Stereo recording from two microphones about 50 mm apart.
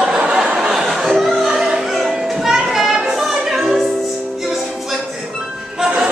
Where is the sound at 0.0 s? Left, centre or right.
Centre.